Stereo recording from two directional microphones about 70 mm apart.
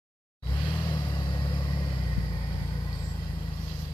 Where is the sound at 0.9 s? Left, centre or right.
Left.